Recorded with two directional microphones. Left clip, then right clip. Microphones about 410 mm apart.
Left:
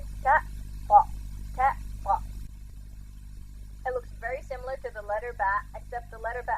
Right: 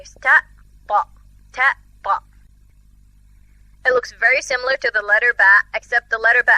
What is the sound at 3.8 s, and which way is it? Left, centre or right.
A woman's voice, right.